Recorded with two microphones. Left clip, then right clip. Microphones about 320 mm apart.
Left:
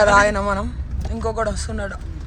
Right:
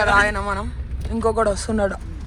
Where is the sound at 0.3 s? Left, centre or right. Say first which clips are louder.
Left 3 dB; centre.